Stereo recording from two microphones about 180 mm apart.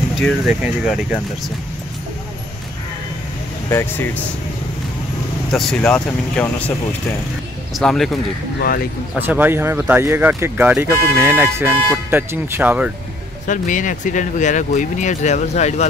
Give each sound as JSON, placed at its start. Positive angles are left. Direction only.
{"t": 0.2, "sound": "speech", "side_deg": 0}
{"t": 3.7, "sound": "speech", "side_deg": 10}
{"t": 5.5, "sound": "speech", "side_deg": 0}
{"t": 7.7, "sound": "speech", "side_deg": 0}
{"t": 8.5, "sound": "speech", "side_deg": 55}
{"t": 9.2, "sound": "speech", "side_deg": -10}
{"t": 13.5, "sound": "speech", "side_deg": 45}